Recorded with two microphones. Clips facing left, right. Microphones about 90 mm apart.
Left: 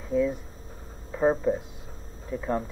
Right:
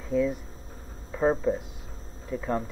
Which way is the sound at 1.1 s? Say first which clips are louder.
Left 1 dB; 5° left (ahead or behind).